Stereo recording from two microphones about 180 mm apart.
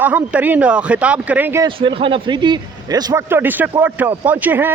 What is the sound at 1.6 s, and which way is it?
Speech, 30° right (ahead or behind).